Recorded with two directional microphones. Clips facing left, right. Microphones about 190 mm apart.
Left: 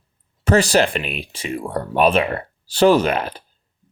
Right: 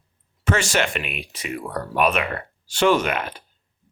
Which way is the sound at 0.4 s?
35° left (ahead or behind).